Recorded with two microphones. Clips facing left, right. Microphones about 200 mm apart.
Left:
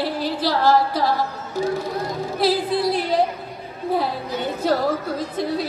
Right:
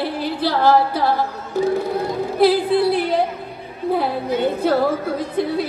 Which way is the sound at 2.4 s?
60° right (ahead or behind).